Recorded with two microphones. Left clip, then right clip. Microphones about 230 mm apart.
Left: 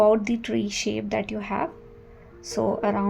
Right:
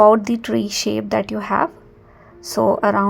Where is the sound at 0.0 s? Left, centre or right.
Right.